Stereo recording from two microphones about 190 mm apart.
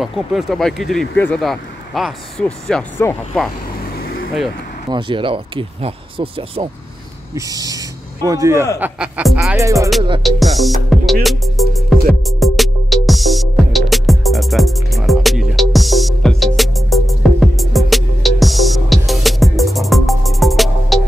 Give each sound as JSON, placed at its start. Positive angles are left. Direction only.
{"t": 0.0, "sound": "speech", "side_deg": 0}
{"t": 4.8, "sound": "speech", "side_deg": -25}
{"t": 10.2, "sound": "speech", "side_deg": 0}
{"t": 11.2, "sound": "music", "side_deg": 0}